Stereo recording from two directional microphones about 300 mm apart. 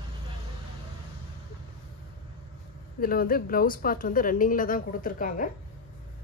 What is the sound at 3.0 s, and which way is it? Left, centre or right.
Speech, left.